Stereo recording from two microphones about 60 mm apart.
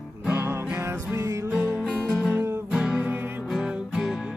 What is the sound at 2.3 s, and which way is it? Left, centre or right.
Music, right.